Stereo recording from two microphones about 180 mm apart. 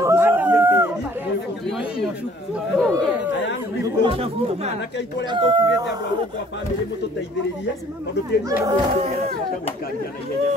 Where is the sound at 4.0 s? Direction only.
35° right (ahead or behind).